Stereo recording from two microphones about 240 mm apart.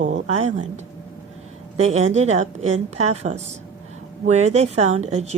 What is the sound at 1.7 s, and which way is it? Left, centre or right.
Speech, right.